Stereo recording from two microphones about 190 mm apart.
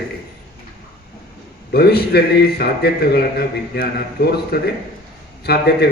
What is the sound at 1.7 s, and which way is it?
A man's voice, 55° left (ahead or behind).